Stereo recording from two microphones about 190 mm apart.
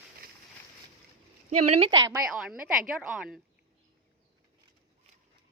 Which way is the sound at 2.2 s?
5° right (ahead or behind).